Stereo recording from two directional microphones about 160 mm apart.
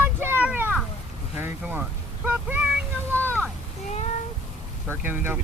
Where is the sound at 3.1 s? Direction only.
10° left (ahead or behind).